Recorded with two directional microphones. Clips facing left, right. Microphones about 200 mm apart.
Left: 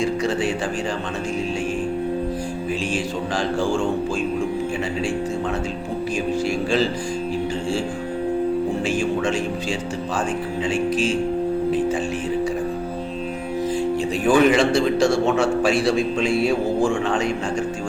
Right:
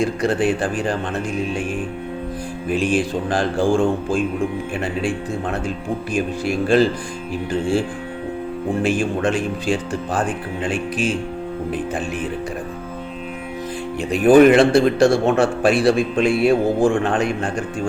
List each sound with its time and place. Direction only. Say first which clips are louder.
0.0 s a man's voice: right 3 dB; 55° right (ahead or behind)
2.6 s a man's voice: right 8 dB; 55° right (ahead or behind)
8.8 s a man's voice: right 2 dB; 55° right (ahead or behind)
14.0 s a man's voice: right 7 dB; 60° right (ahead or behind)